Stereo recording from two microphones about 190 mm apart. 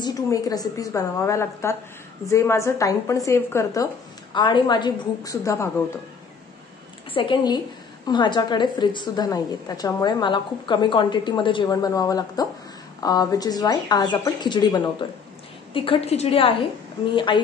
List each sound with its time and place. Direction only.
0.0 s a woman's voice: 20° left (ahead or behind)
7.2 s a woman's voice: 25° left (ahead or behind)